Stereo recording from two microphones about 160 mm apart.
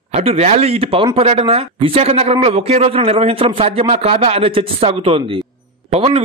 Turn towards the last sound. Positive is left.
turn(degrees=-40)  # may be behind; listen again after turning